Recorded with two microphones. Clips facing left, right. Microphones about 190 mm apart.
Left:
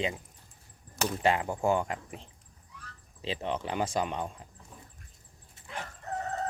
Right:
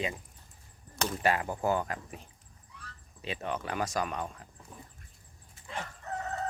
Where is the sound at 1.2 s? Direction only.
20° left (ahead or behind).